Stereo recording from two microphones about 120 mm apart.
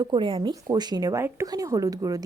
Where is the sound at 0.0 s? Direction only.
40° right (ahead or behind).